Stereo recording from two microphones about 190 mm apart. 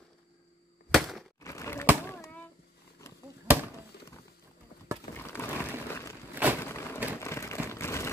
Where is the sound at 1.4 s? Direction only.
15° left (ahead or behind).